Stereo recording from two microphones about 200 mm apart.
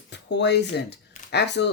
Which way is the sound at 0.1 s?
60° left (ahead or behind).